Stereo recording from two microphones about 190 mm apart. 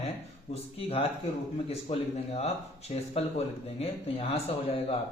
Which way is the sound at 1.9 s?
30° left (ahead or behind).